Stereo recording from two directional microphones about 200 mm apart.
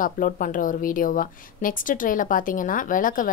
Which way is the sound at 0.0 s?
45° left (ahead or behind).